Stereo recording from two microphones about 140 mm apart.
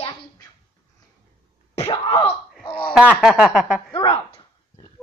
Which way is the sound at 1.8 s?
35° left (ahead or behind).